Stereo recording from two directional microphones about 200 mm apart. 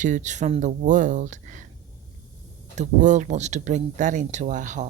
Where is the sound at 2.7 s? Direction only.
35° right (ahead or behind).